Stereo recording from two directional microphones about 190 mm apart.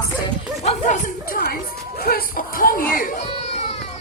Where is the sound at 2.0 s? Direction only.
50° left (ahead or behind).